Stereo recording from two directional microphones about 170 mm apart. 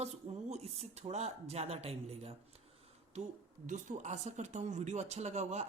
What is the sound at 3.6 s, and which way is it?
Speech, 45° right (ahead or behind).